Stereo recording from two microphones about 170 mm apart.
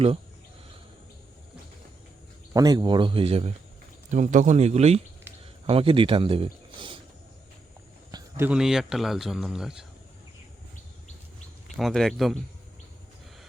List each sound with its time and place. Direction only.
2.5 s speech: 25° right (ahead or behind)
4.1 s speech: 45° right (ahead or behind); by 7.0 s 30° right (ahead or behind)
8.1 s a sound: 25° right (ahead or behind)
8.4 s speech: 5° right (ahead or behind)
11.8 s speech: centre (ahead or behind)